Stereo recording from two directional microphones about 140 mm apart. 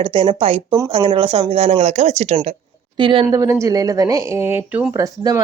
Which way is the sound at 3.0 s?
35° right (ahead or behind).